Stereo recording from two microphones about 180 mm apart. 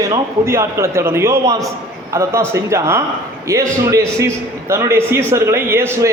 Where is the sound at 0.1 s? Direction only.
15° right (ahead or behind).